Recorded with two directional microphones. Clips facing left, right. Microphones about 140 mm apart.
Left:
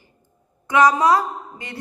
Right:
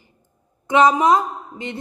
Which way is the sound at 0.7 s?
25° right (ahead or behind).